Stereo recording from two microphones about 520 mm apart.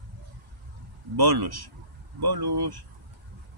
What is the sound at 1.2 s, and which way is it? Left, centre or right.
Speech, right.